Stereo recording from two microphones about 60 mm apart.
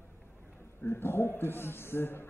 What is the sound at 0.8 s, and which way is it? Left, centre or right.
A man's voice, left.